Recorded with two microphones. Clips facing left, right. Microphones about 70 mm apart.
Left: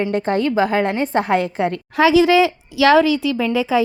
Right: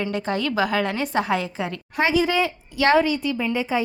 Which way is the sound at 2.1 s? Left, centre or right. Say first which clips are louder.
Left 8 dB; left.